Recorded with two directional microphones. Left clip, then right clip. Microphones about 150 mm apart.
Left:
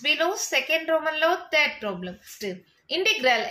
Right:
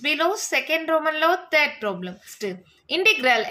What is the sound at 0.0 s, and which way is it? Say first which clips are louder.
A woman's voice: right 1 dB; 40° right (ahead or behind).